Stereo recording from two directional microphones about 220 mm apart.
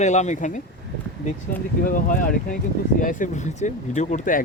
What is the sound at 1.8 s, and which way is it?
Speech, 40° left (ahead or behind).